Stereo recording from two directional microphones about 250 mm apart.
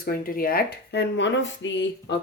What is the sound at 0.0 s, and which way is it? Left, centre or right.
Speech, left.